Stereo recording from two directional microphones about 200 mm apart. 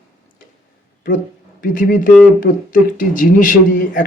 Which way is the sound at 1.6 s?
40° left (ahead or behind).